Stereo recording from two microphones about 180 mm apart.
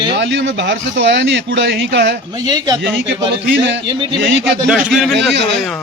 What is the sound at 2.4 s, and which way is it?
Speech, 20° right (ahead or behind).